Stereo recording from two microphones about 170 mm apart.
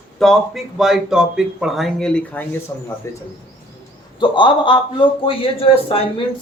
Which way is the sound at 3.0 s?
15° left (ahead or behind).